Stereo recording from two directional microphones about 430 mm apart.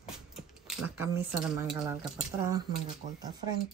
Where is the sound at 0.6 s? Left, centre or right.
Centre.